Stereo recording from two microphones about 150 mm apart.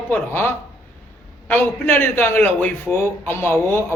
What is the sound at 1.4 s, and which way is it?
A man's voice, 15° left (ahead or behind).